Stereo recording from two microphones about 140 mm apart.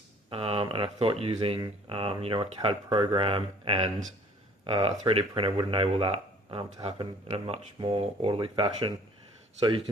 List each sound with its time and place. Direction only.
0.3 s speech: 40° right (ahead or behind)